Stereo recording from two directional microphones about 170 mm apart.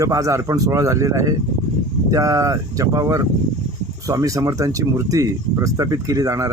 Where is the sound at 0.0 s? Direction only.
20° right (ahead or behind).